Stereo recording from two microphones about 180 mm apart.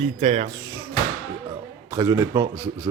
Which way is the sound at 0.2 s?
35° right (ahead or behind).